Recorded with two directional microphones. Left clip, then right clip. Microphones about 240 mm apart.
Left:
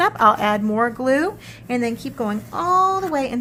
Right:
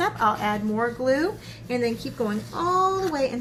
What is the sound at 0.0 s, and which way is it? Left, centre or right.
A woman's voice, left.